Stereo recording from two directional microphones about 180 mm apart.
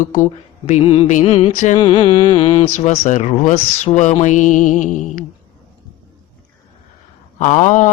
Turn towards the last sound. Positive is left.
turn(degrees=40)  # may be behind; listen again after turning